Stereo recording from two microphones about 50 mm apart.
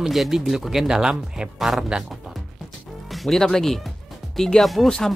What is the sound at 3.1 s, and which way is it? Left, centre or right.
Speech, centre.